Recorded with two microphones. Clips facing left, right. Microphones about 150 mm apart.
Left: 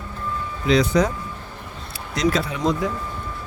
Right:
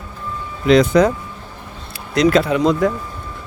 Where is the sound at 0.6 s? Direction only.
55° right (ahead or behind).